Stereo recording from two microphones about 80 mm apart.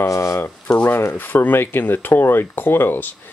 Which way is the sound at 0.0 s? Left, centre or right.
Left.